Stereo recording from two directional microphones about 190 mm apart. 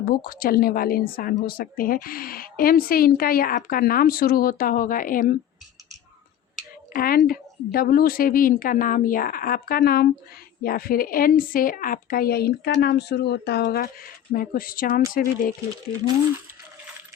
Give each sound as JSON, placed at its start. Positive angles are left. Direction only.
{"t": 0.0, "sound": "speech", "side_deg": 45}
{"t": 6.9, "sound": "speech", "side_deg": 50}